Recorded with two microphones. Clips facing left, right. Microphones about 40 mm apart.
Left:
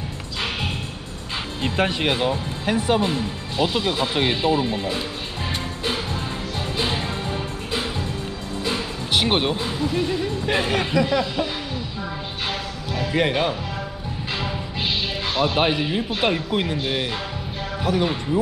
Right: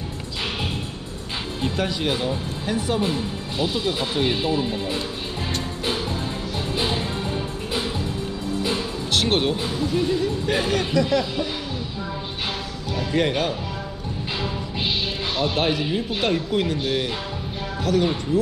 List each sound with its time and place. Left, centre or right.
1.6 s speech: left
3.1 s speech: left
4.1 s speech: left
4.5 s speech: left
9.1 s speech: centre
12.9 s speech: centre
15.3 s speech: left